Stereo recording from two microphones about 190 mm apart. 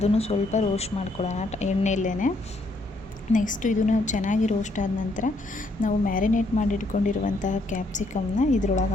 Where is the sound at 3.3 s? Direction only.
45° left (ahead or behind).